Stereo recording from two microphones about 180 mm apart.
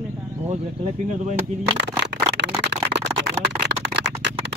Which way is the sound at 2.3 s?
70° right (ahead or behind).